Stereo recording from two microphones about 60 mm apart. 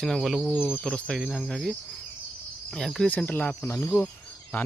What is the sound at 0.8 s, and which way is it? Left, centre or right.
Speech, centre.